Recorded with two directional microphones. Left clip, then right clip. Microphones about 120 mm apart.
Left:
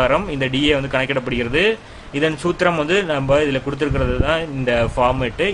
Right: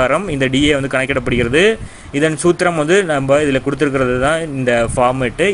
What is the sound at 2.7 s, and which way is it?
A man's voice, 30° right (ahead or behind).